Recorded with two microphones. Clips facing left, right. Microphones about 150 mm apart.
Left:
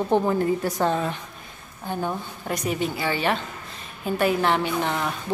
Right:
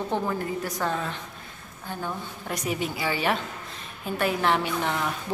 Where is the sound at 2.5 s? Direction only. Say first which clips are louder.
Left 3 dB; 5° right (ahead or behind).